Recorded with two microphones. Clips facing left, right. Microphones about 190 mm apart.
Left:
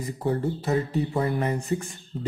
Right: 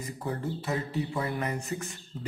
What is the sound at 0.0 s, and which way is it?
Speech, 35° left (ahead or behind).